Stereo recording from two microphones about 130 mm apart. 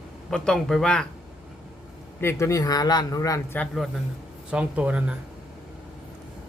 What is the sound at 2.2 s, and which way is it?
A man's voice, 20° left (ahead or behind).